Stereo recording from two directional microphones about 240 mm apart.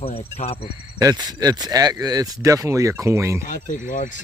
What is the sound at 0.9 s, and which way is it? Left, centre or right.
Speech, centre.